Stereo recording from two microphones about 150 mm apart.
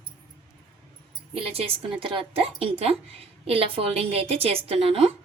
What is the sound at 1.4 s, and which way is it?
A woman's voice, 40° right (ahead or behind).